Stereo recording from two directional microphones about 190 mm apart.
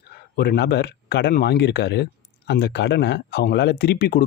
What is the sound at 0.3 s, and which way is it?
Speech, 60° left (ahead or behind).